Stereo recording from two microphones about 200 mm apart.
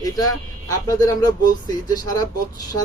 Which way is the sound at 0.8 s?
20° left (ahead or behind).